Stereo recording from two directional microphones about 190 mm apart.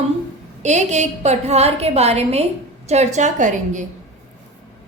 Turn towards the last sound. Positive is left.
turn(degrees=-40)  # may be behind; listen again after turning